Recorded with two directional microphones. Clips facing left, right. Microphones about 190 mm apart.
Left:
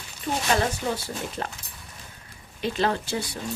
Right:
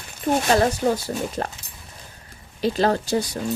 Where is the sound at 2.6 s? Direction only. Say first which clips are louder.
Right 5 dB; 40° right (ahead or behind).